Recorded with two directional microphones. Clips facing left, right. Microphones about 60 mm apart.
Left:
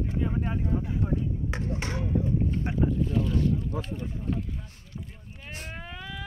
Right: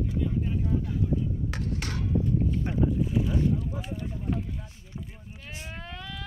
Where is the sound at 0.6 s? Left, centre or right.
Left.